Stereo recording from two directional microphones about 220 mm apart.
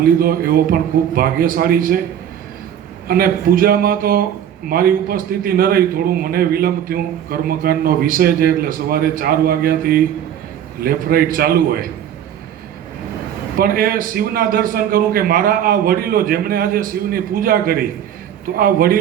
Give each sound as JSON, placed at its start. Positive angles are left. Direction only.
{"t": 0.2, "sound": "a man's voice", "side_deg": -40}
{"t": 3.1, "sound": "a man's voice", "side_deg": -40}
{"t": 13.6, "sound": "a man's voice", "side_deg": -40}